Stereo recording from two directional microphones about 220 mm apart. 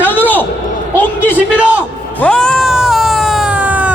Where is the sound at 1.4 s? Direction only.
5° right (ahead or behind).